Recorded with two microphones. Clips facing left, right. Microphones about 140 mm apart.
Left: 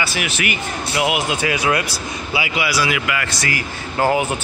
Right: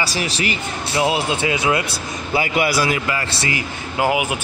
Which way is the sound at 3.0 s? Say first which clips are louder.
Even; 30° right (ahead or behind).